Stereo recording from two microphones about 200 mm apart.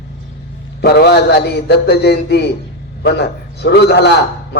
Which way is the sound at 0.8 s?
55° left (ahead or behind).